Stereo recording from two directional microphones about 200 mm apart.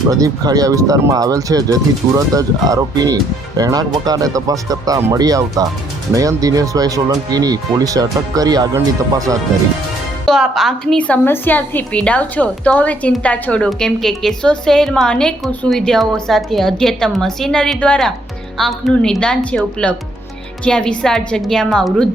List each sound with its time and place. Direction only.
0.1 s speech: 20° right (ahead or behind)
10.2 s a woman's voice: centre (ahead or behind)